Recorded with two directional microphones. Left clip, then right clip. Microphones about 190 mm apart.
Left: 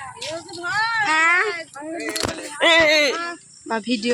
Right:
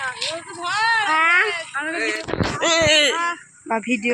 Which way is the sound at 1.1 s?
35° left (ahead or behind).